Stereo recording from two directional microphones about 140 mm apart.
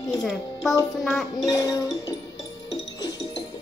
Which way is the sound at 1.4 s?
25° left (ahead or behind).